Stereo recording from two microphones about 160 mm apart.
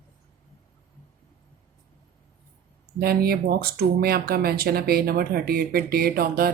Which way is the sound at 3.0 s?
70° right (ahead or behind).